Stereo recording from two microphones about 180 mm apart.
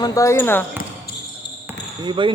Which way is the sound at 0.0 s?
20° left (ahead or behind).